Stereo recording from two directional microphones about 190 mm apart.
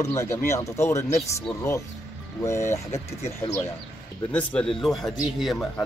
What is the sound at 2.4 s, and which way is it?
Speech, 15° left (ahead or behind).